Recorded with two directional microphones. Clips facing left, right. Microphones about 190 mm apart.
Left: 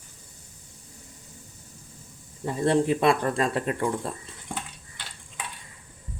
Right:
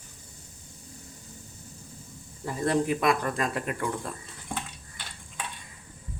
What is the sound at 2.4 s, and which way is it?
Speech, 25° left (ahead or behind).